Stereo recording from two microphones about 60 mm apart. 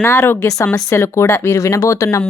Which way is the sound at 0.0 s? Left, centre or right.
Left.